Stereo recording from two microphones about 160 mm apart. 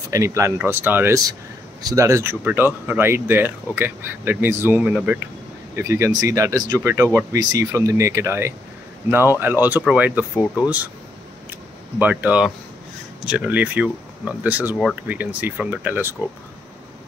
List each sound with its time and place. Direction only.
0.1 s speech: 20° right (ahead or behind)
12.0 s speech: 10° right (ahead or behind)